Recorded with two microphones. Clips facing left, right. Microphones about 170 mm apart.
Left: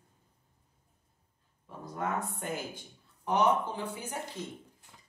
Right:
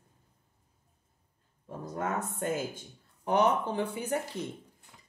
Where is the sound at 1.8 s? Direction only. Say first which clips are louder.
Right 1 dB; 45° right (ahead or behind).